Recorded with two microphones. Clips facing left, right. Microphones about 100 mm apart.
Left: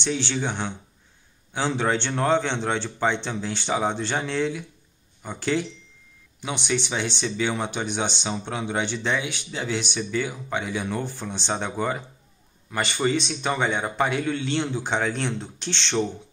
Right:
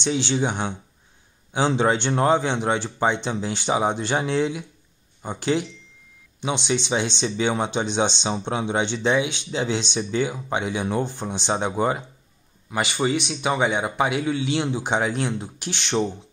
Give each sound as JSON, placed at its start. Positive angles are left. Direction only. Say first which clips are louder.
{"t": 0.0, "sound": "a man's voice", "louder": "right 4 dB", "side_deg": -15}